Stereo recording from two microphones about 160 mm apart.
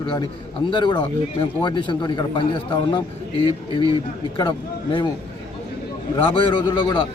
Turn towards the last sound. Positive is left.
turn(degrees=30)  # may be behind; listen again after turning